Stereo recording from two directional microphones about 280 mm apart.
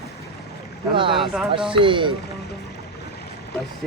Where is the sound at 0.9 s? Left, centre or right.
Centre.